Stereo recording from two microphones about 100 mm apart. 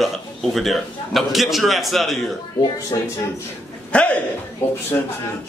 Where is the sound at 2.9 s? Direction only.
35° left (ahead or behind).